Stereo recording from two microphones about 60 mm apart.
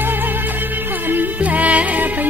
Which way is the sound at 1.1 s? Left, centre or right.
Right.